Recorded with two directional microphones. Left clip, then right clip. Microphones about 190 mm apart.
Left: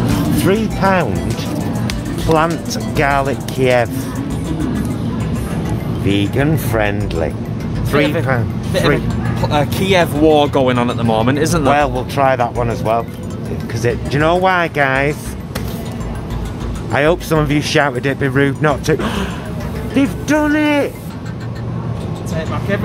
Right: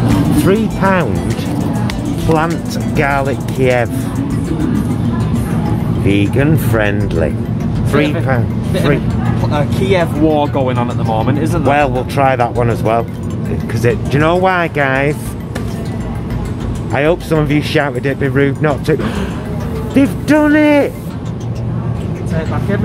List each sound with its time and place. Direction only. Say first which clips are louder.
0.5 s speech: even; 10° left (ahead or behind)
2.2 s speech: left 1 dB; 15° left (ahead or behind)
6.0 s speech: right 2 dB; 10° left (ahead or behind)
9.5 s speech: even; 45° left (ahead or behind)
11.7 s speech: right 2 dB; 5° left (ahead or behind)
16.9 s speech: even; 15° left (ahead or behind)
19.9 s speech: right 3 dB; 5° right (ahead or behind)